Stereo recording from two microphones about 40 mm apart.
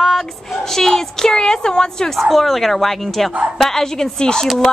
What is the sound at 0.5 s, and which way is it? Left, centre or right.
Speech, centre.